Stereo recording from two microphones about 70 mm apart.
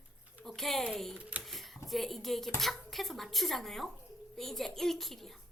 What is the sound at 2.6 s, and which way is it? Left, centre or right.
Speech, centre.